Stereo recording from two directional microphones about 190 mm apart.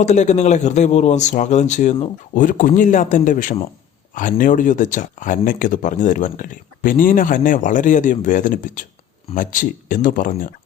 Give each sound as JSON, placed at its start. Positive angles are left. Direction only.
{"t": 0.0, "sound": "speech", "side_deg": 40}